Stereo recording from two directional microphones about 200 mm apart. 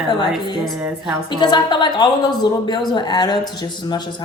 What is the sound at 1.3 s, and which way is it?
A woman's voice, 20° left (ahead or behind).